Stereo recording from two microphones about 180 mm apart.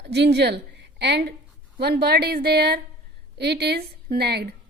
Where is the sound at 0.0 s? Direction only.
65° right (ahead or behind).